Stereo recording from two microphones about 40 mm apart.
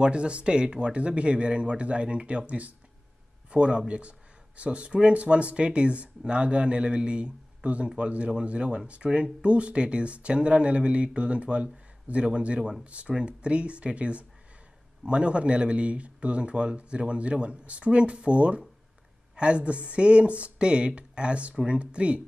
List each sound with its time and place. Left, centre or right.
0.0 s speech: right